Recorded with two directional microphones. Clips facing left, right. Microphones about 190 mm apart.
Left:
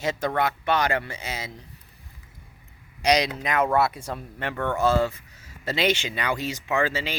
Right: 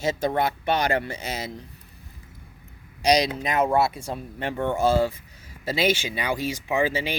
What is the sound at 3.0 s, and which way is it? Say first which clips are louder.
Speech: right 1 dB; 35° right (ahead or behind).